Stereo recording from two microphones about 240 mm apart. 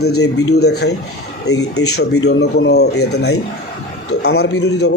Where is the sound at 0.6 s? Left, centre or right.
Left.